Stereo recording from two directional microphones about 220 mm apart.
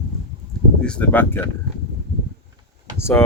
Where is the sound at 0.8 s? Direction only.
5° left (ahead or behind).